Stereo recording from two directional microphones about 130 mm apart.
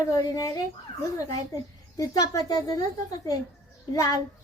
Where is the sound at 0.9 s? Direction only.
40° left (ahead or behind).